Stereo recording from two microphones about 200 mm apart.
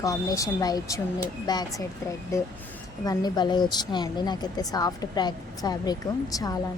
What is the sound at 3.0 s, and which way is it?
Speech, 20° left (ahead or behind).